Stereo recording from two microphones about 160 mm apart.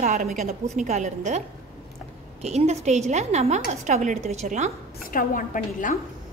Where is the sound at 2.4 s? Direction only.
40° right (ahead or behind).